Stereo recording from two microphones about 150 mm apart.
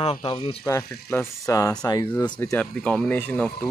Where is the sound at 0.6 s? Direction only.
20° left (ahead or behind).